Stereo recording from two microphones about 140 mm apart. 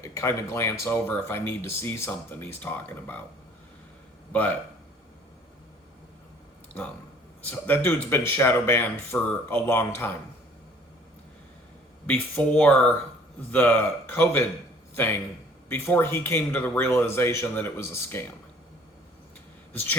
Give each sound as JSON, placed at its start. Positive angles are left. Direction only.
{"t": 0.0, "sound": "speech", "side_deg": 20}
{"t": 4.3, "sound": "speech", "side_deg": 10}
{"t": 7.7, "sound": "speech", "side_deg": 15}
{"t": 12.0, "sound": "a man's voice", "side_deg": 10}